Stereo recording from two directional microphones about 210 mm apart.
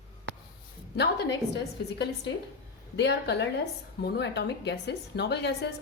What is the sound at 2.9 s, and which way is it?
A woman's voice, 55° left (ahead or behind).